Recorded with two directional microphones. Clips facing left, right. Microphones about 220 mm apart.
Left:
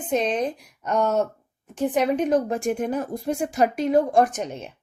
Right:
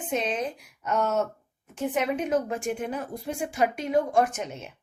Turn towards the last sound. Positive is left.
turn(degrees=35)  # may be behind; listen again after turning